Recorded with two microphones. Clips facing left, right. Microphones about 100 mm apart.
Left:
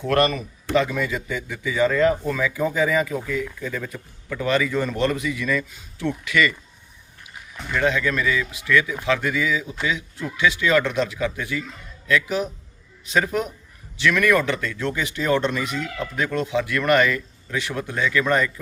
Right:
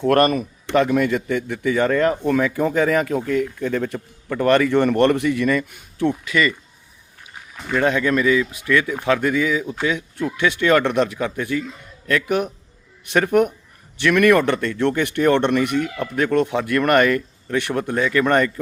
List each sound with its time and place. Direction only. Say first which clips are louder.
0.0 s speech: right 4 dB; 50° right (ahead or behind)
7.7 s speech: right 4 dB; 40° right (ahead or behind)
10.2 s a man's voice: right 1 dB; 55° right (ahead or behind)